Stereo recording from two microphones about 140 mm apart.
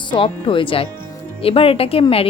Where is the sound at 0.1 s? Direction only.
35° left (ahead or behind).